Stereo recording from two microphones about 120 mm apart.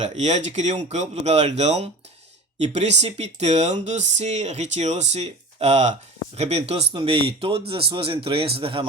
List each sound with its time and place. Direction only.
0.0 s speech: 70° right (ahead or behind)
6.9 s speech: 50° right (ahead or behind)